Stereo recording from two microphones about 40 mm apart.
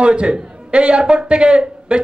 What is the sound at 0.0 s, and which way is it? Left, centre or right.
A man's voice, right.